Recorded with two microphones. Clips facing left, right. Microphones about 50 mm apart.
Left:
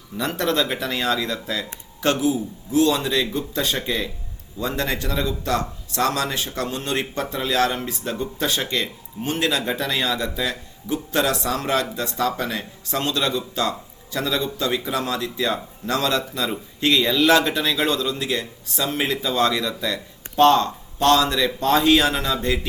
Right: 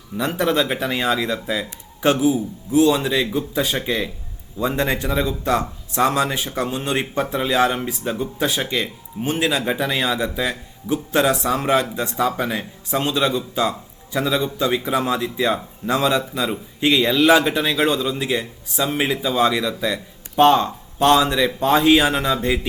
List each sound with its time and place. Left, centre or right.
0.2 s speech: centre